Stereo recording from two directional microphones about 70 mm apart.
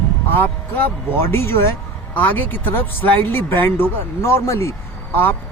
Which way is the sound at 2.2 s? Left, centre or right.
Left.